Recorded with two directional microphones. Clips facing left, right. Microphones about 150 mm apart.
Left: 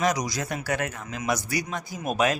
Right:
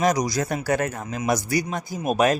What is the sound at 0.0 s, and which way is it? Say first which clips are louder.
Speech: right 4 dB; 40° right (ahead or behind).